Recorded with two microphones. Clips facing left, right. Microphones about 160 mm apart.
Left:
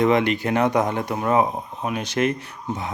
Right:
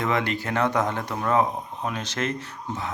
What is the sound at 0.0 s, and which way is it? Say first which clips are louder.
Speech: left 7 dB; 20° left (ahead or behind).